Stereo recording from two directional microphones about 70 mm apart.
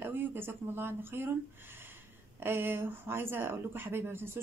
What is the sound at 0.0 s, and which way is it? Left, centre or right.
Speech, right.